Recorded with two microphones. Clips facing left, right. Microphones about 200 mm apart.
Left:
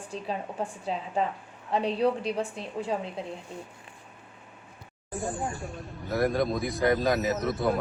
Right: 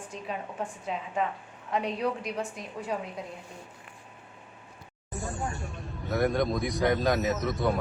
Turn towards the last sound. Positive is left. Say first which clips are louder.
# left 1 dB
turn(degrees=0)  # may be behind; listen again after turning